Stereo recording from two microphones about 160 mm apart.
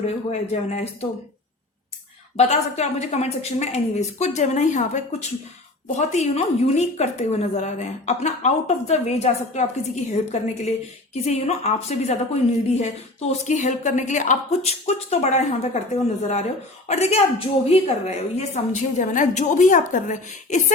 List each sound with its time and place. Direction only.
0.0 s a woman's voice: 45° left (ahead or behind)
2.3 s a woman's voice: 45° left (ahead or behind)